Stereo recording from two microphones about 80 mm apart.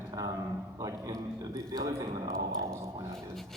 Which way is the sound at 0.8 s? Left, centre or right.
Right.